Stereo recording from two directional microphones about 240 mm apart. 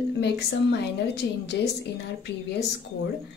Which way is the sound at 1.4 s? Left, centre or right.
Left.